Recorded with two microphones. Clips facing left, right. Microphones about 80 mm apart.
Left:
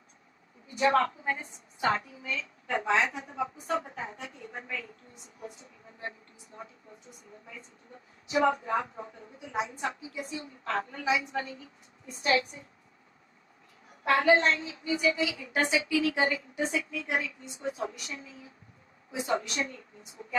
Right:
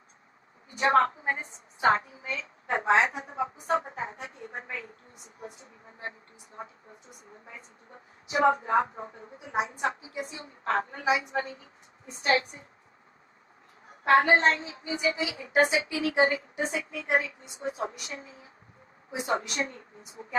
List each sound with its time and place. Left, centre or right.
0.8 s a woman's voice: right
8.3 s a woman's voice: right
13.8 s a woman's voice: right